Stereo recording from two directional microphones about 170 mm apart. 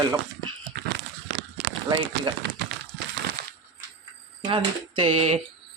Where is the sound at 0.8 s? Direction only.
90° right.